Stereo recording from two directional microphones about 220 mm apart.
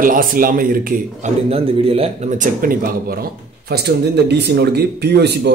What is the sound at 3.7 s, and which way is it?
Speech, 45° right (ahead or behind).